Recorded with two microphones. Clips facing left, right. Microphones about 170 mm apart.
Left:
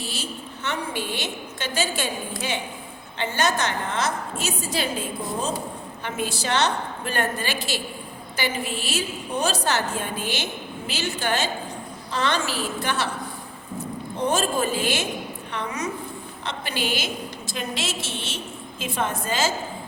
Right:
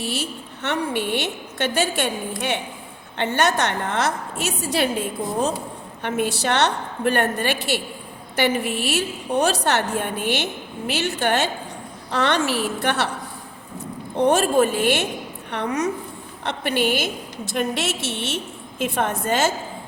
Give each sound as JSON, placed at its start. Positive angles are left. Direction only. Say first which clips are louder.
{"t": 0.0, "sound": "a woman's voice", "louder": "right 5 dB", "side_deg": -65}
{"t": 14.2, "sound": "a woman's voice", "louder": "right 7 dB", "side_deg": -65}